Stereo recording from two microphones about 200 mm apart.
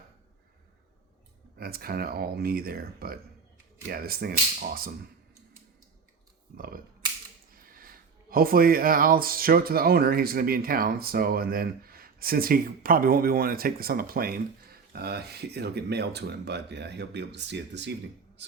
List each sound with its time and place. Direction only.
1.5 s speech: 50° right (ahead or behind)
6.6 s speech: 45° right (ahead or behind)